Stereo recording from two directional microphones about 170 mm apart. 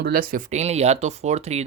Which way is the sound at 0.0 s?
60° right (ahead or behind).